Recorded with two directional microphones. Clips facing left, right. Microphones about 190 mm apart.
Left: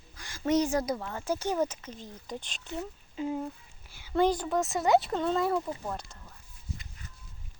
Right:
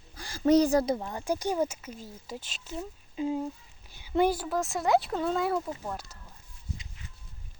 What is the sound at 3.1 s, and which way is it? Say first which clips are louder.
A woman's voice: right 2 dB; 20° right (ahead or behind).